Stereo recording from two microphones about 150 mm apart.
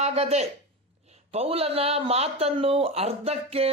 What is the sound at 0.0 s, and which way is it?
Speech, 45° right (ahead or behind).